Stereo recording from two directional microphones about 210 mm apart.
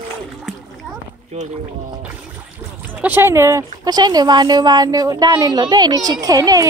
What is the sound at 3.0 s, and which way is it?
A child's voice, 10° right (ahead or behind).